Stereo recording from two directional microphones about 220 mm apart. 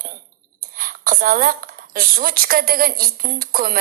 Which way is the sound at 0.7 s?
40° right (ahead or behind).